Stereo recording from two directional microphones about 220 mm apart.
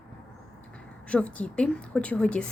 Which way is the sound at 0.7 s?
5° left (ahead or behind).